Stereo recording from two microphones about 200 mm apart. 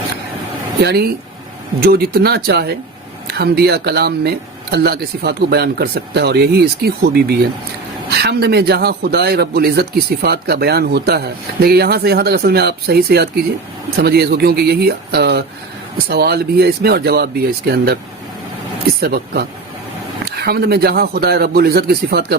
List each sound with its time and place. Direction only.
0.8 s a man's voice: 55° right (ahead or behind)
18.9 s a man's voice: 50° right (ahead or behind)